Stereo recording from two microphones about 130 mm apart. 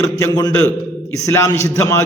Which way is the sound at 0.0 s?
25° left (ahead or behind).